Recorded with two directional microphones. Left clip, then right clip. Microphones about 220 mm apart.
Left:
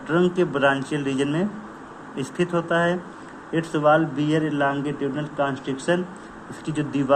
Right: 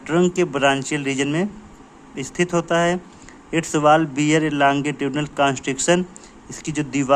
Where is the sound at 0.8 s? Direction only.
70° right (ahead or behind).